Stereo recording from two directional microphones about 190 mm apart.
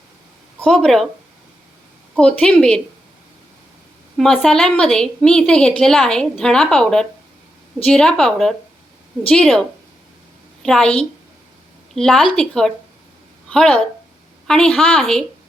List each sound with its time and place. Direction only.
0.6 s a woman's voice: 5° left (ahead or behind)
2.1 s a woman's voice: 5° left (ahead or behind)
4.2 s a woman's voice: centre (ahead or behind)